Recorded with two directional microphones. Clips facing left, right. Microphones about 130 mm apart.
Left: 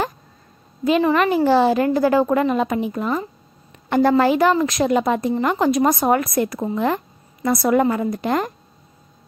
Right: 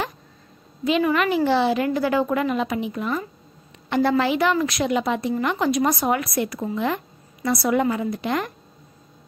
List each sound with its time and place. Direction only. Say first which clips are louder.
1.0 s a woman's voice: left 3 dB; 35° left (ahead or behind)